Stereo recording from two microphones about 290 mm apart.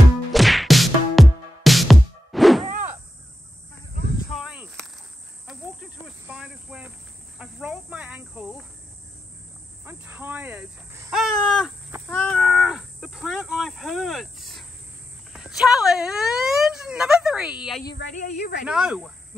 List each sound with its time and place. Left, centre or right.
0.3 s music: centre
4.3 s snake: centre
5.5 s cricket: centre
9.8 s a sound: centre
15.3 s fowl: centre
18.1 s a sound: left
18.7 s snake: centre